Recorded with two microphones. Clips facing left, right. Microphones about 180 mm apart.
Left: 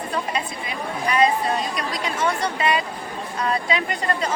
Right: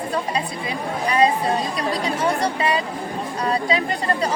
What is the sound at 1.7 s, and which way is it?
Speech, 35° right (ahead or behind).